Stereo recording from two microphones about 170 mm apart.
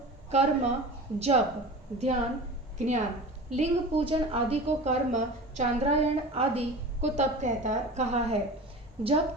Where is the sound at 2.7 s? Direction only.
45° right (ahead or behind).